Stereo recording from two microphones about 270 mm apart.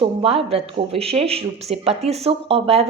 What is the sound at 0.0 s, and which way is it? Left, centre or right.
Speech, right.